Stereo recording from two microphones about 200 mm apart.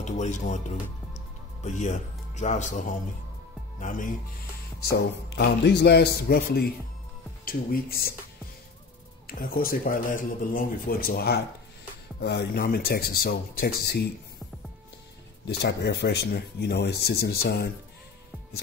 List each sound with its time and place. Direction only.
0.0 s speech: 35° left (ahead or behind)
3.8 s speech: 45° left (ahead or behind)
4.8 s speech: 55° left (ahead or behind)
9.3 s speech: 45° left (ahead or behind)
15.4 s speech: 55° left (ahead or behind)